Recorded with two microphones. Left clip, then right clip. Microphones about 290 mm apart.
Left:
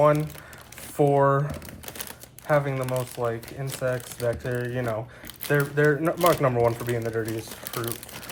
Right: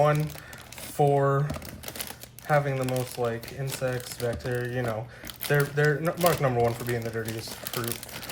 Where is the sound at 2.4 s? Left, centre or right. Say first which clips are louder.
Left 1 dB; centre.